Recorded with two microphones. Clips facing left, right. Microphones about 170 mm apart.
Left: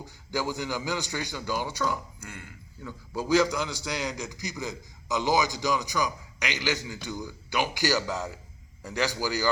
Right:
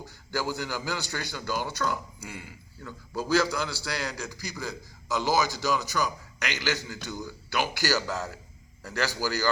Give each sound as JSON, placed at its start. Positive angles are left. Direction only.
{"t": 0.0, "sound": "a man's voice", "side_deg": 15}